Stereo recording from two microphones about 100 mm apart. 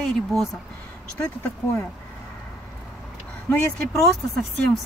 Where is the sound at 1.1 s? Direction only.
20° left (ahead or behind).